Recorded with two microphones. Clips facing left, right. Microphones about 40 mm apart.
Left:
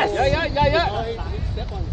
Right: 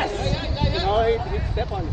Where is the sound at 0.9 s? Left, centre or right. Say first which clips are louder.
Right 7 dB; right.